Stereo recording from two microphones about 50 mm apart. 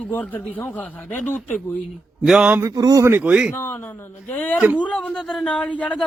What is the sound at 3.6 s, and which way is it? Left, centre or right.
A man's voice, left.